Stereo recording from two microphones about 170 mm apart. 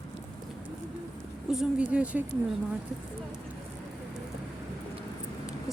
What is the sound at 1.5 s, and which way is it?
Speech, 5° right (ahead or behind).